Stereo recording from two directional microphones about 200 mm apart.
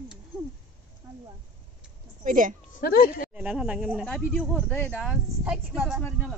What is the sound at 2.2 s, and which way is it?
Speech, 40° right (ahead or behind).